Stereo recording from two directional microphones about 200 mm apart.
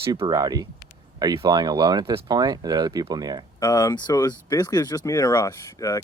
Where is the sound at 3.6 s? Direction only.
15° left (ahead or behind).